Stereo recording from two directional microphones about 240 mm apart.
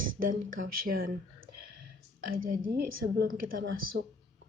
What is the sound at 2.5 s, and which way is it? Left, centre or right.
A woman's voice, right.